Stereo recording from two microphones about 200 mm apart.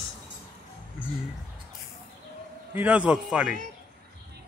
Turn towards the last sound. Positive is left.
turn(degrees=-5)  # may be behind; listen again after turning